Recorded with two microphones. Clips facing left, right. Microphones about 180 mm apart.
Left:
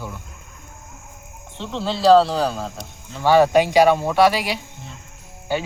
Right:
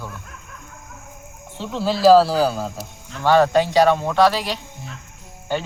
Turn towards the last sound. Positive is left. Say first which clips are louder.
# left 1 dB
turn(degrees=10)  # may be behind; listen again after turning